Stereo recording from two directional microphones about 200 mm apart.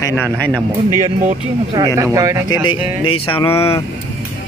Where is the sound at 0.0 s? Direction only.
10° left (ahead or behind).